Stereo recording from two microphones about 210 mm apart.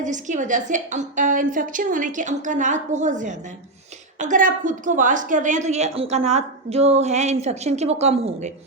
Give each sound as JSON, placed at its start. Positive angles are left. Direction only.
{"t": 0.0, "sound": "a woman's voice", "side_deg": -35}